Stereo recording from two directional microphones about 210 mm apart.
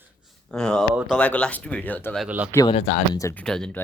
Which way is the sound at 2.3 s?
5° right (ahead or behind).